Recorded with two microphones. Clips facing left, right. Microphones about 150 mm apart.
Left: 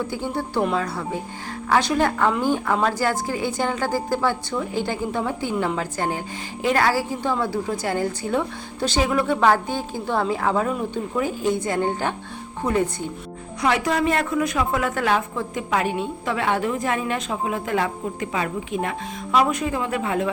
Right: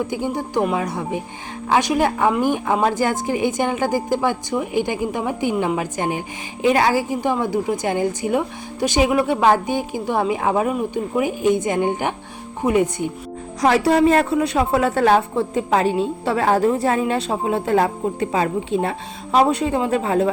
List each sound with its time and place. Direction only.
0.1 s a woman's voice: 15° right (ahead or behind)
13.6 s a woman's voice: 35° right (ahead or behind)